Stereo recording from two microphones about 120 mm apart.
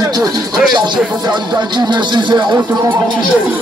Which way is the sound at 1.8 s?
40° right (ahead or behind).